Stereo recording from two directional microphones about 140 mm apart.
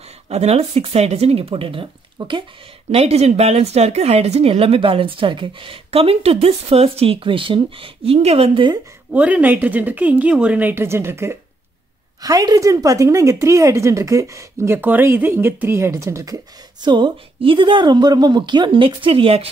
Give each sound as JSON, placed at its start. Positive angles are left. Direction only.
{"t": 0.3, "sound": "speech", "side_deg": -50}
{"t": 2.9, "sound": "speech", "side_deg": -45}
{"t": 9.1, "sound": "a woman's voice", "side_deg": -10}
{"t": 16.8, "sound": "a woman's voice", "side_deg": -35}